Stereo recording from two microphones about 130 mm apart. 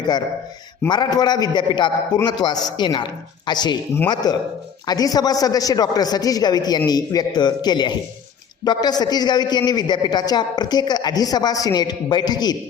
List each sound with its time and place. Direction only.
0.9 s a man's voice: 35° left (ahead or behind)